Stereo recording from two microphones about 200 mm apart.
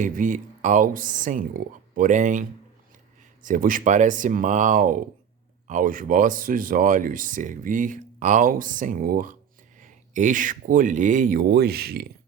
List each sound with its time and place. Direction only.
0.0 s speech: 40° right (ahead or behind)